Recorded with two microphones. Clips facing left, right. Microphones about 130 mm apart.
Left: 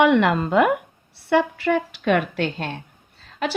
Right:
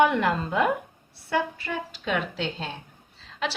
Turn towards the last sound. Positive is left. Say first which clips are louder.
# left 4 dB
turn(degrees=50)  # may be behind; listen again after turning